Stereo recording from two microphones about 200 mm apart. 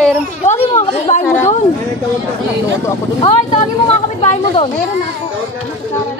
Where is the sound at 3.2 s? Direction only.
30° left (ahead or behind).